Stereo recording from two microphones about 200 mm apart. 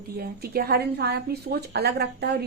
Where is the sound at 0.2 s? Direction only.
50° right (ahead or behind).